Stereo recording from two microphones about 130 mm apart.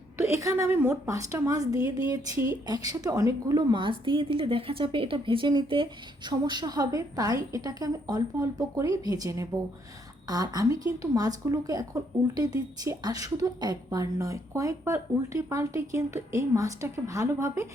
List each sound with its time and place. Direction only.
0.2 s a woman's voice: 25° right (ahead or behind)